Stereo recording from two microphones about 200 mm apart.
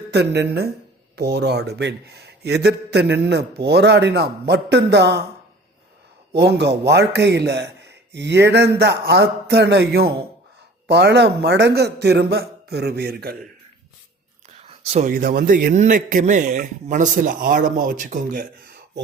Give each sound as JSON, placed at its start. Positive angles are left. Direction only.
{"t": 0.1, "sound": "speech", "side_deg": -55}
{"t": 6.3, "sound": "speech", "side_deg": -55}
{"t": 14.6, "sound": "a sound", "side_deg": -30}
{"t": 15.1, "sound": "a man's voice", "side_deg": -45}